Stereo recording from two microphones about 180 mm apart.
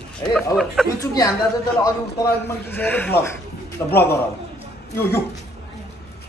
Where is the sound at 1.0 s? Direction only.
20° left (ahead or behind).